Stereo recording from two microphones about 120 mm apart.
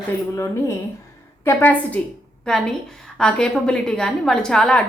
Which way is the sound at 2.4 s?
5° left (ahead or behind).